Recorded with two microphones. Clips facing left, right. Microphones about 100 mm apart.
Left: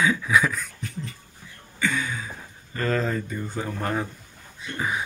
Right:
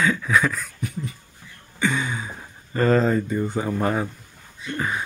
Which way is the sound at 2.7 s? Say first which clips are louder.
Right 7 dB; 30° right (ahead or behind).